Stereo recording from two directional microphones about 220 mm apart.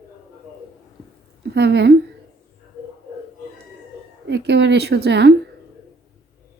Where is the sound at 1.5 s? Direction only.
50° right (ahead or behind).